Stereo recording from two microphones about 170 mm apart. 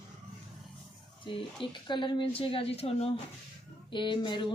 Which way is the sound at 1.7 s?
30° left (ahead or behind).